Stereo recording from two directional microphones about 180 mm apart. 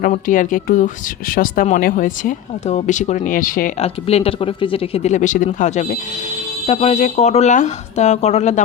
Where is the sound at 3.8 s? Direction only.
35° left (ahead or behind).